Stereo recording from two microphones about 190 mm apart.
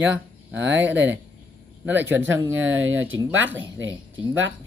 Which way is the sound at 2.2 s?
90° right.